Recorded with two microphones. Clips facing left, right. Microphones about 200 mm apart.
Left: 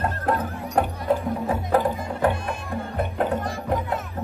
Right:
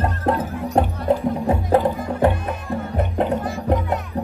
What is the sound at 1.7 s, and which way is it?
Music, 25° right (ahead or behind).